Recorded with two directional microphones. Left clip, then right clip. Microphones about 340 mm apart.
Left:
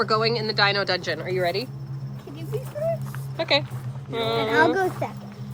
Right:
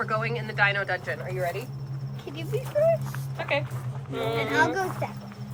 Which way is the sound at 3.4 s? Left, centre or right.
Centre.